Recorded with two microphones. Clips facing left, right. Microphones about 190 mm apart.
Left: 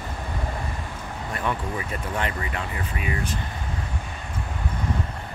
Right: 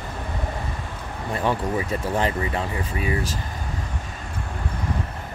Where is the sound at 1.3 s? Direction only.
30° right (ahead or behind).